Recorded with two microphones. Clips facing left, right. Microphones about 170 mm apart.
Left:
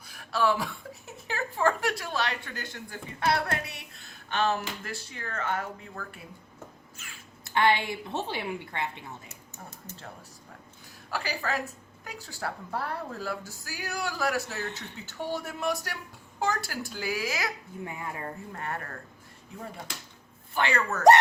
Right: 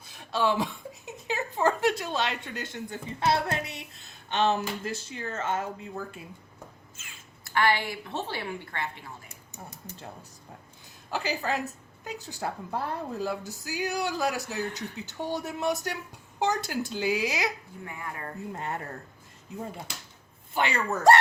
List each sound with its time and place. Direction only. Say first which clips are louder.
0.1 s a woman's voice: even; 20° right (ahead or behind)
7.0 s quack: left 3 dB; 20° right (ahead or behind)
7.4 s a woman's voice: left 1 dB; 20° left (ahead or behind)
11.1 s a woman's voice: right 2 dB; 20° right (ahead or behind)
17.8 s a woman's voice: left 1 dB; 20° left (ahead or behind)
18.5 s a woman's voice: right 2 dB; 20° right (ahead or behind)
20.5 s a woman's voice: even; 20° right (ahead or behind)